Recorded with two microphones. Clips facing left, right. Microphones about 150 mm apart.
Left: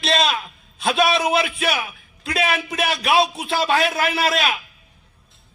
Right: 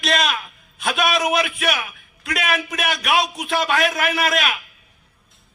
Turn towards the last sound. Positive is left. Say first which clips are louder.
# even
turn(degrees=30)  # may be behind; listen again after turning